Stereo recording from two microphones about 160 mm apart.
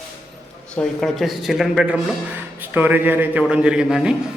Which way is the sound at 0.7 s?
5° left (ahead or behind).